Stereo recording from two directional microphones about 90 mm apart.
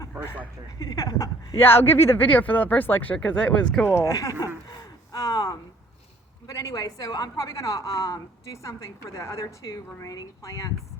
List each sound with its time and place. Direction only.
0.8 s a woman's voice: 45° left (ahead or behind)
1.5 s speech: 25° left (ahead or behind); by 3.8 s 10° left (ahead or behind)
4.0 s a woman's voice: 40° left (ahead or behind)
4.7 s gasp: 45° left (ahead or behind)
6.5 s a woman's voice: 40° left (ahead or behind)